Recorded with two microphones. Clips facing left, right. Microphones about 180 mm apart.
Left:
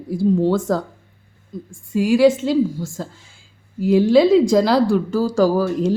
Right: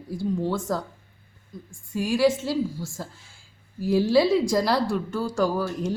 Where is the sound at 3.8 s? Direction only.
20° left (ahead or behind).